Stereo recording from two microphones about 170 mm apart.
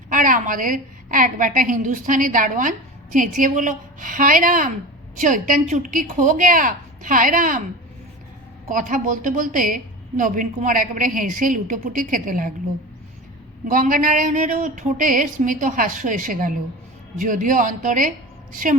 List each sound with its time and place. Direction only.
0.1 s a woman's voice: 50° right (ahead or behind)
8.7 s a woman's voice: 50° right (ahead or behind)
13.7 s a woman's voice: 50° right (ahead or behind)